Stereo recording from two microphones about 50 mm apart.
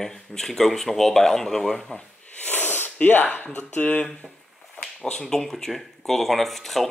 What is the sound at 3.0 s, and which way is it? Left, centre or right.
Speech, left.